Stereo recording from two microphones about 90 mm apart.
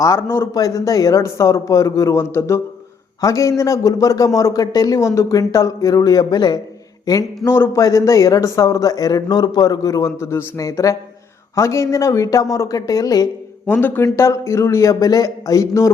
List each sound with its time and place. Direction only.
0.0 s a man's voice: 30° left (ahead or behind)
0.5 s speech: 40° left (ahead or behind)
7.4 s a man's voice: 25° left (ahead or behind)
7.8 s speech: 35° left (ahead or behind)
13.7 s speech: 25° left (ahead or behind)